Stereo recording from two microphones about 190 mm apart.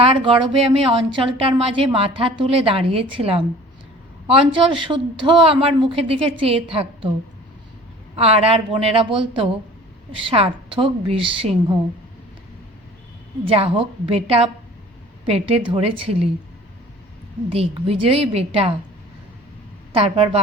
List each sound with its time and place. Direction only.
0.0 s a woman's voice: 30° right (ahead or behind)
8.1 s a woman's voice: 30° right (ahead or behind)
13.4 s a woman's voice: 30° right (ahead or behind)
17.5 s a woman's voice: 30° right (ahead or behind)
19.9 s a woman's voice: 30° right (ahead or behind)